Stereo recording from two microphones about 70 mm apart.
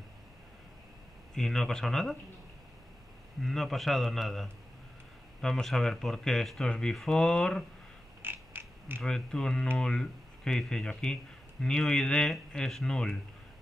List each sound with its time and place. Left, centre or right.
1.3 s speech: centre
3.4 s speech: centre
8.2 s a sound: right
9.0 s speech: centre